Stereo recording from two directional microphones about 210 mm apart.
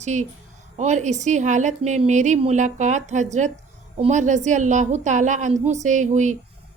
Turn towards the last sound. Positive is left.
turn(degrees=-35)  # may be behind; listen again after turning